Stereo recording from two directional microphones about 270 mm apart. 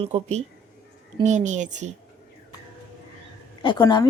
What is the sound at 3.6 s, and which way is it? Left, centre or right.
Speech, centre.